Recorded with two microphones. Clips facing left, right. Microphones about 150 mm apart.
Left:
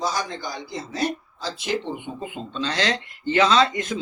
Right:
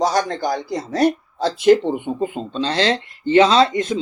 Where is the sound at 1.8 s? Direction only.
40° right (ahead or behind).